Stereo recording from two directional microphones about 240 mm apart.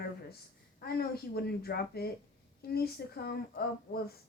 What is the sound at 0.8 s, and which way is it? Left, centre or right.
Speech, left.